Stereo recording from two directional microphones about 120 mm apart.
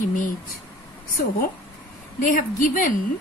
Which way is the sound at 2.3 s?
90° left.